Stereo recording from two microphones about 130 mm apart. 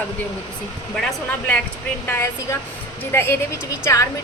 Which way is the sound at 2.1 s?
20° left (ahead or behind).